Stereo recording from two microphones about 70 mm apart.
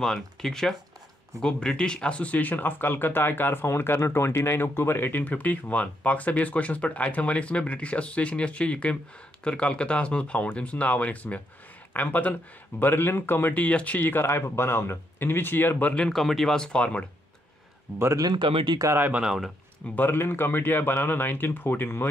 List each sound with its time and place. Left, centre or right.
0.0 s speech: centre; by 15.9 s left
16.1 s speech: centre
18.1 s speech: right
18.9 s speech: right
19.2 s speech: centre
20.0 s speech: left